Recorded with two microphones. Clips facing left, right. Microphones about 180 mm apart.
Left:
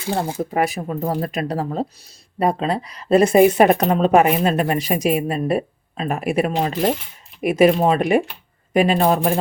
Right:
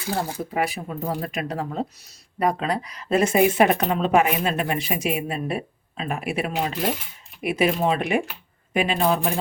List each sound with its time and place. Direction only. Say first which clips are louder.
0.1 s speech: left 4 dB; 25° left (ahead or behind)
0.5 s speech: left 4 dB; 45° left (ahead or behind)